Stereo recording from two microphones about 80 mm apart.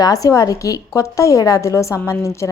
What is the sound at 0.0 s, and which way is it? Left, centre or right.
A woman's voice, left.